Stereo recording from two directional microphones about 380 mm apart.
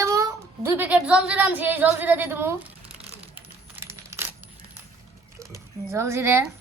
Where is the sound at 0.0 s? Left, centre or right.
Centre.